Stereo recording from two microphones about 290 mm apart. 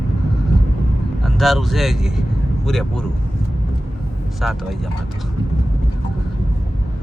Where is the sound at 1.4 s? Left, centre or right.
Centre.